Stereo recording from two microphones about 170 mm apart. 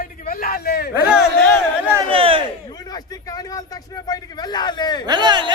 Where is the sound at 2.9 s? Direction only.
20° left (ahead or behind).